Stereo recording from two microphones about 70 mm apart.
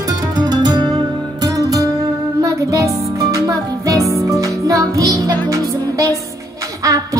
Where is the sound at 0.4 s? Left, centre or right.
Right.